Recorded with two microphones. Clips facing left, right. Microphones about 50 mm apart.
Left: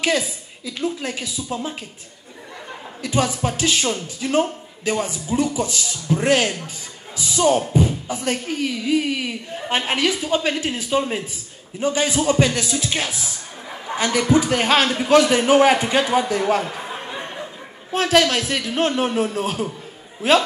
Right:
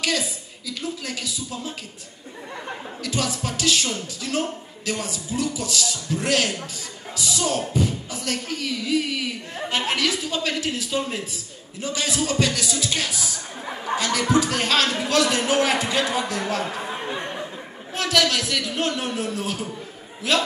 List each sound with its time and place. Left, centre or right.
0.7 s speech: left
3.0 s speech: left
17.9 s a man's voice: left